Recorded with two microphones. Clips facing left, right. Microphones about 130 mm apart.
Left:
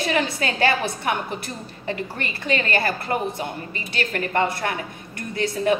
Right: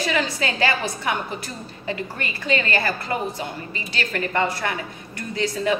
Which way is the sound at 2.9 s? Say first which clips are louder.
Left 1 dB; 55° left (ahead or behind).